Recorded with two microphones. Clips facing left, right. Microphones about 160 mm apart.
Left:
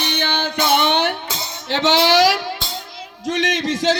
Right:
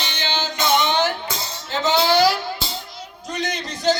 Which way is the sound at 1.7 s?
75° left (ahead or behind).